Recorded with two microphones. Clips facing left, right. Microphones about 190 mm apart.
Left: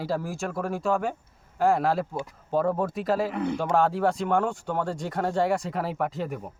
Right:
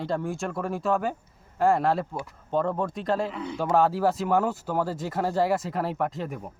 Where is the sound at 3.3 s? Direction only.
55° left (ahead or behind).